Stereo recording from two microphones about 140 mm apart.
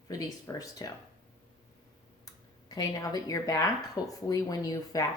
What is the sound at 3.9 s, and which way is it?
Speech, 25° left (ahead or behind).